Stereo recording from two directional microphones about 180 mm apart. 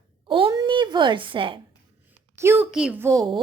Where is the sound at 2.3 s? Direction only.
15° right (ahead or behind).